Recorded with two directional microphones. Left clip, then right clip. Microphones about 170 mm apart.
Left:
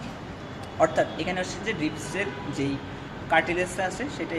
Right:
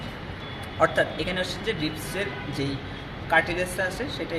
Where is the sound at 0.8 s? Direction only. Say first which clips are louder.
Even; 15° left (ahead or behind).